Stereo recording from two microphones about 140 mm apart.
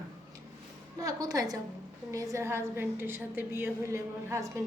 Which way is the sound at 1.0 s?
25° right (ahead or behind).